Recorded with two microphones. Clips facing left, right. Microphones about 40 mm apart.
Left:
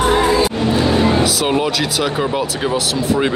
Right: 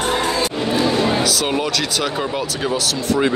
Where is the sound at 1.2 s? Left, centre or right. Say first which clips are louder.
Left 3 dB; centre.